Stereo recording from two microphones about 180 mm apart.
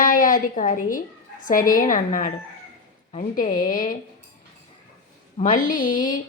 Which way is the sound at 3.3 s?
45° left (ahead or behind).